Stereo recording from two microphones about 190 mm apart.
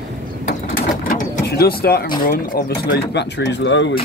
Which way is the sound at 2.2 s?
55° left (ahead or behind).